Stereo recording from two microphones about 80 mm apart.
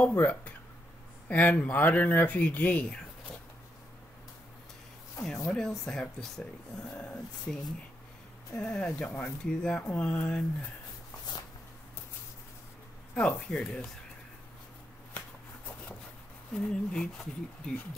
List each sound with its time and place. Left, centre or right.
0.1 s speech: left
5.5 s speech: centre
13.1 s speech: centre
16.5 s speech: centre